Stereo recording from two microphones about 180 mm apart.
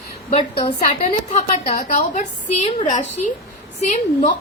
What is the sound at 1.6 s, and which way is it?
A woman's voice, 45° left (ahead or behind).